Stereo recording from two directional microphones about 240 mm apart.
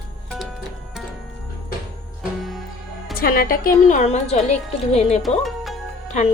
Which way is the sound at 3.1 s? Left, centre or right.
Left.